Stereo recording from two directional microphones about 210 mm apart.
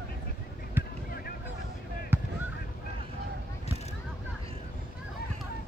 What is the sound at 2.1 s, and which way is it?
Honk, 10° right (ahead or behind).